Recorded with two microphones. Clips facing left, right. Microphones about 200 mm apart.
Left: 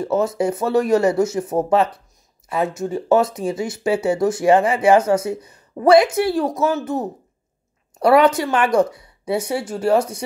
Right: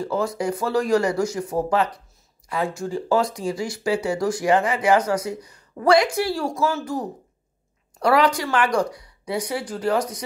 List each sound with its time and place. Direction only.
0.0 s speech: 25° left (ahead or behind)